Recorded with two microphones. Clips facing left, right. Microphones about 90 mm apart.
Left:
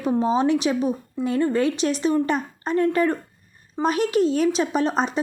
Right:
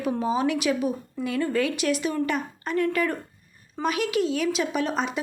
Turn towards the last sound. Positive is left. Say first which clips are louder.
# left 4 dB
turn(degrees=35)  # may be behind; listen again after turning